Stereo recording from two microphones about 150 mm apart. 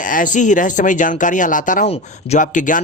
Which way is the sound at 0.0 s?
60° left (ahead or behind).